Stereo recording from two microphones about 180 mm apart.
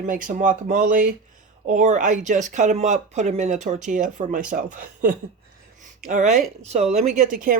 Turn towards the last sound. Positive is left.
turn(degrees=-50)  # may be behind; listen again after turning